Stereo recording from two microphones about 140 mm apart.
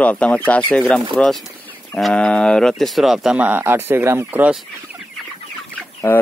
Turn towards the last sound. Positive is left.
turn(degrees=15)  # may be behind; listen again after turning